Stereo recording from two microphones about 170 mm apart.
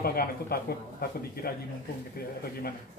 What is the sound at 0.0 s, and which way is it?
Speech, 65° left (ahead or behind).